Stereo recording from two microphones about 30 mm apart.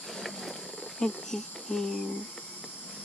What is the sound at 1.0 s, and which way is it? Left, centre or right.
Speech, centre.